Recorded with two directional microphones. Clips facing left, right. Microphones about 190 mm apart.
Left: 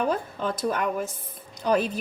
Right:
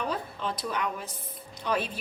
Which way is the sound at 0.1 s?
50° left (ahead or behind).